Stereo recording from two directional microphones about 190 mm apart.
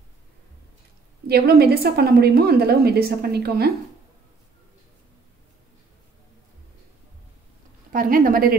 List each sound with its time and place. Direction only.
1.2 s a woman's voice: 55° right (ahead or behind)
7.9 s a woman's voice: 45° right (ahead or behind)